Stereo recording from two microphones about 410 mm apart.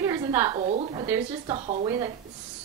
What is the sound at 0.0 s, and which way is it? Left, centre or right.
A woman's voice, centre.